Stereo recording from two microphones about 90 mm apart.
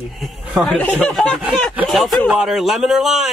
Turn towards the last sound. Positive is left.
turn(degrees=-5)  # may be behind; listen again after turning